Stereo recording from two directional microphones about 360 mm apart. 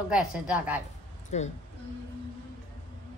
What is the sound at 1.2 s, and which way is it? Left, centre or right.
Speech, centre.